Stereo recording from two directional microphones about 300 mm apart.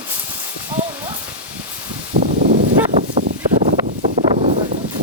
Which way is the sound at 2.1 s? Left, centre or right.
Right.